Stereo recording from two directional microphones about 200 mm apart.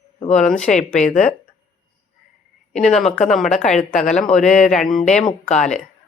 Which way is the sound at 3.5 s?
35° left (ahead or behind).